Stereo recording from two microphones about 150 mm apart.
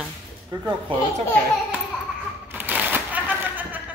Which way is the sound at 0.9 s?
35° right (ahead or behind).